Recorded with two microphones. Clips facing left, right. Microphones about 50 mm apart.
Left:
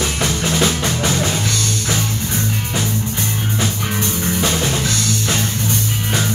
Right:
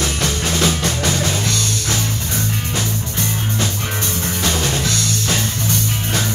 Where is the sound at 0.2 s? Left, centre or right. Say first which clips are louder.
Left 2 dB; centre.